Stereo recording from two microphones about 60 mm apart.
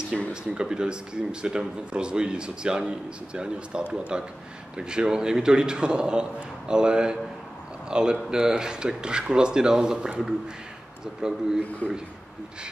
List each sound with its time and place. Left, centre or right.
0.3 s speech: centre
11.8 s speech: left